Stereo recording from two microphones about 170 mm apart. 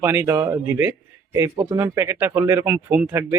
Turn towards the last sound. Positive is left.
turn(degrees=-10)  # may be behind; listen again after turning